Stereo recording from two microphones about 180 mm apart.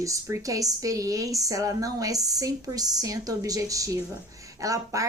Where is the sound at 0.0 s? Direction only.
20° right (ahead or behind).